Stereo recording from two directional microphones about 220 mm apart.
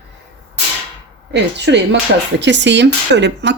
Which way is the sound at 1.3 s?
50° right (ahead or behind).